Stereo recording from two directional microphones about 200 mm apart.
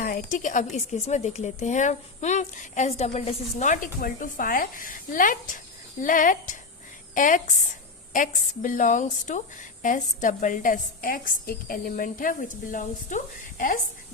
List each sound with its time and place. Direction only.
0.0 s a woman's voice: 45° left (ahead or behind)